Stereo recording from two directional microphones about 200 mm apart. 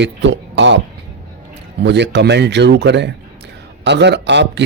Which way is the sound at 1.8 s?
60° right (ahead or behind).